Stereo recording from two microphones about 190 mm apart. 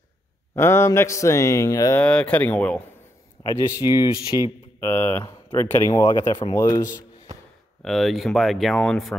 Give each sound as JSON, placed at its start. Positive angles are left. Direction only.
{"t": 0.6, "sound": "speech", "side_deg": 15}
{"t": 3.4, "sound": "speech", "side_deg": 20}
{"t": 7.8, "sound": "speech", "side_deg": 0}